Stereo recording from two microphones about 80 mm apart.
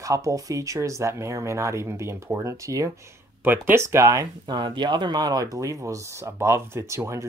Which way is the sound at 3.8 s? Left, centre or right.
Right.